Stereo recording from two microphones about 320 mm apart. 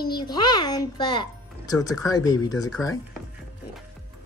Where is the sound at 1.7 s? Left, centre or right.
Centre.